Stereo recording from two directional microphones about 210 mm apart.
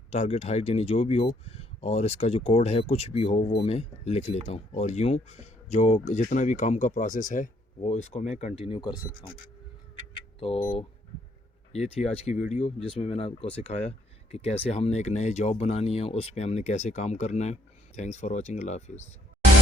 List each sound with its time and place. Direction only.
0.1 s speech: 30° left (ahead or behind)
10.4 s speech: 25° left (ahead or behind)
11.7 s speech: 30° left (ahead or behind)